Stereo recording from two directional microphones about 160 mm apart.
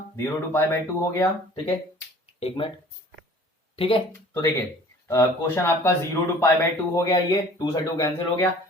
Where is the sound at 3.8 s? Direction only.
35° left (ahead or behind).